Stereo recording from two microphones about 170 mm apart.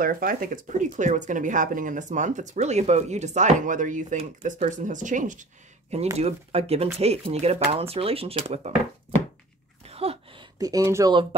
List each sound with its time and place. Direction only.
0.0 s speech: 55° right (ahead or behind); by 8.7 s 35° right (ahead or behind)
9.8 s a sound: 35° right (ahead or behind)
10.6 s speech: 20° right (ahead or behind)